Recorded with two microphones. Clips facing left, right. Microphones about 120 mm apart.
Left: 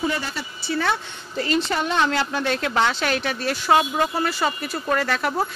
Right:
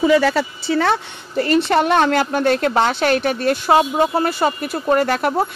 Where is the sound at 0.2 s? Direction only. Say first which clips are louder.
Right 14 dB; 80° right.